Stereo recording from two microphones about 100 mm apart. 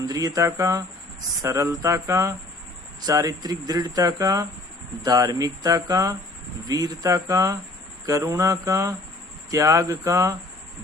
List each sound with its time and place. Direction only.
0.0 s speech: 35° right (ahead or behind)